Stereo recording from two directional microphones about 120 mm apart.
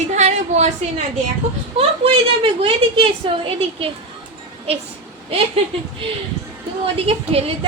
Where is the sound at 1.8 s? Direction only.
50° right (ahead or behind).